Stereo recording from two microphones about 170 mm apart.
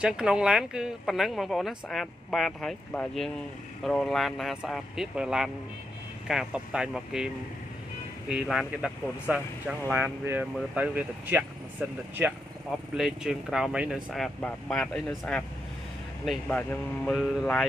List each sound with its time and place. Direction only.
0.0 s speech: 5° right (ahead or behind)
8.3 s speech: 5° right (ahead or behind)